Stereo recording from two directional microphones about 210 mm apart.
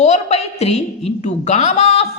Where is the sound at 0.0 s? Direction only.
30° left (ahead or behind).